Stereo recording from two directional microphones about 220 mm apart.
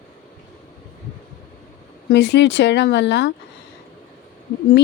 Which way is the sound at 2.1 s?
50° left (ahead or behind).